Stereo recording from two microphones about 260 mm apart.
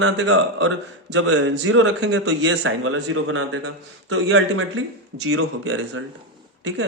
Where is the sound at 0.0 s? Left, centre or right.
Right.